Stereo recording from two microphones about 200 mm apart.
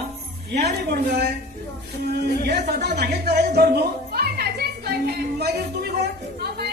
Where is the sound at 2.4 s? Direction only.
55° right (ahead or behind).